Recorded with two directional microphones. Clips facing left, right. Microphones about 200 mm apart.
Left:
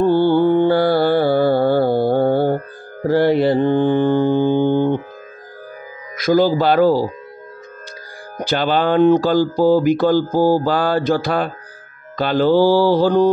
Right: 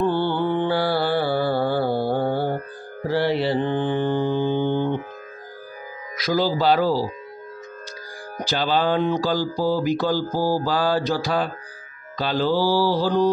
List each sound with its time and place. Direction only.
0.0 s music: 40° left (ahead or behind)
3.1 s mantra: 45° left (ahead or behind)
6.1 s speech: 50° left (ahead or behind)
8.5 s speech: 60° left (ahead or behind)